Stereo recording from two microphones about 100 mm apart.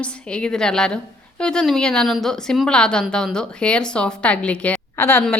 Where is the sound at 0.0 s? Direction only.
10° left (ahead or behind).